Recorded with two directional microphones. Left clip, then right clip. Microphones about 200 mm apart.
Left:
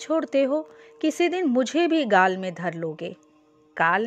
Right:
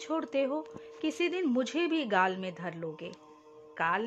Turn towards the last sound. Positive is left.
turn(degrees=30)  # may be behind; listen again after turning